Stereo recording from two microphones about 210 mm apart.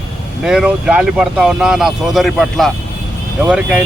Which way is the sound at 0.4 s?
5° right (ahead or behind).